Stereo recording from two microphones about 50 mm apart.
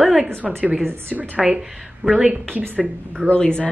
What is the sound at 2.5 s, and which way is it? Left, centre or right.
Speech, right.